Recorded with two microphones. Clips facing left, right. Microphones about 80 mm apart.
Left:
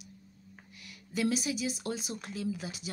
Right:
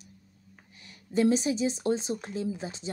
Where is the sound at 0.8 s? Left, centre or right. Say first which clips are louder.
Right 7 dB; right.